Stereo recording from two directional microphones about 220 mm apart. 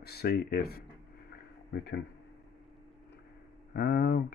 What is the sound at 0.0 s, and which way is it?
Speech, 45° left (ahead or behind).